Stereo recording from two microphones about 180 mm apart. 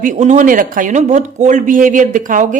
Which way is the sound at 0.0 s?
45° right (ahead or behind).